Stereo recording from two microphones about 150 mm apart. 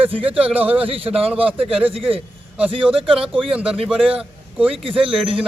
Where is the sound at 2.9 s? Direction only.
35° right (ahead or behind).